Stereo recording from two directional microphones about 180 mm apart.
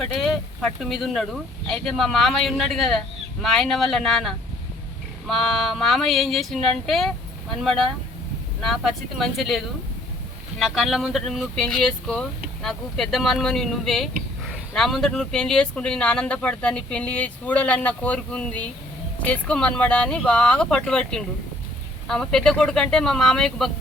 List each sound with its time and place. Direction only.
0.0 s speech: 5° left (ahead or behind)